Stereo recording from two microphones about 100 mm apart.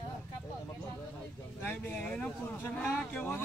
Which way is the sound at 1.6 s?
15° left (ahead or behind).